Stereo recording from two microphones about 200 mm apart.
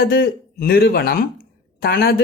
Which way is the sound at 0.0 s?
50° left (ahead or behind).